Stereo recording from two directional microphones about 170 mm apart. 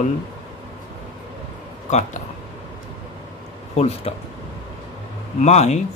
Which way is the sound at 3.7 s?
40° left (ahead or behind).